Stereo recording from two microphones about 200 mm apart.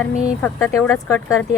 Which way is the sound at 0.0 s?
10° left (ahead or behind).